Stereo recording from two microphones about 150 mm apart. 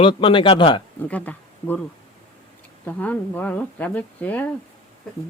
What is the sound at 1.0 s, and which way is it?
Speech, 10° left (ahead or behind).